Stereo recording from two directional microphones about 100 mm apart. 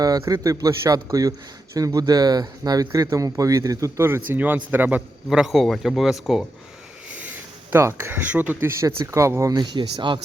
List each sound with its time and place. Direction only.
0.0 s a man's voice: 35° right (ahead or behind); by 6.4 s 5° right (ahead or behind)
7.7 s speech: 25° right (ahead or behind)
9.1 s speech: 30° right (ahead or behind)
10.1 s speech: 55° right (ahead or behind)